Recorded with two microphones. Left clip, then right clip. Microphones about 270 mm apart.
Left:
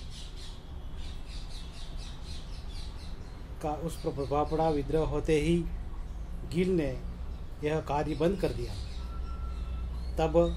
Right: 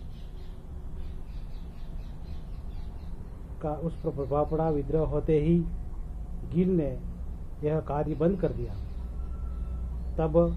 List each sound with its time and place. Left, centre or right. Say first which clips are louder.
3.6 s a man's voice: right 1 dB; left
6.5 s a man's voice: right 1 dB; centre
10.1 s a man's voice: right 1 dB; left